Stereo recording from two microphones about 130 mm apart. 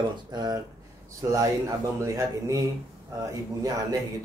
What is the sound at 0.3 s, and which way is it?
Speech, 30° right (ahead or behind).